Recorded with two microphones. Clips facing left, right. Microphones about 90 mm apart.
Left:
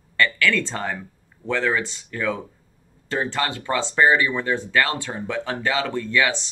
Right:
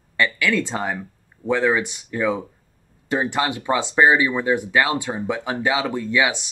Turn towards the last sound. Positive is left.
turn(degrees=-15)  # may be behind; listen again after turning